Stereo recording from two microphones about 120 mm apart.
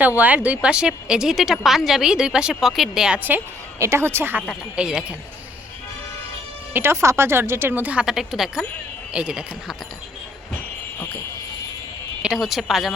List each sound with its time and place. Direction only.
0.2 s speech: 10° right (ahead or behind)
3.2 s a woman's voice: 20° right (ahead or behind)
4.4 s speech: 5° right (ahead or behind)
6.7 s speech: 20° right (ahead or behind)
12.2 s speech: 5° right (ahead or behind)